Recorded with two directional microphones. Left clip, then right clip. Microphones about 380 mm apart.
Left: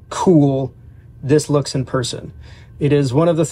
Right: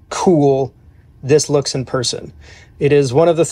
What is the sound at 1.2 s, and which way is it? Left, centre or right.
Speech, right.